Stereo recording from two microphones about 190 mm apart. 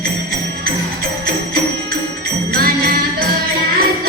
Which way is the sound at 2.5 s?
55° right (ahead or behind).